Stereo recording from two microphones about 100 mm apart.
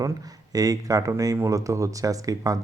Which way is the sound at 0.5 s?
35° right (ahead or behind).